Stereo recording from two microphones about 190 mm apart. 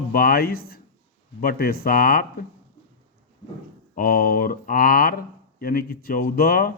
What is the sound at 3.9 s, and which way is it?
Speech, 50° left (ahead or behind).